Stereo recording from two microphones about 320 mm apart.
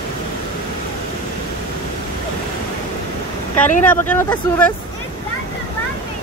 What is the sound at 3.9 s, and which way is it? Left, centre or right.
Speech, centre.